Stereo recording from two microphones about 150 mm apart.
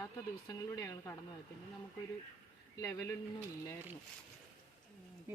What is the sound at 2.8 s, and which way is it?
Speech, 20° left (ahead or behind).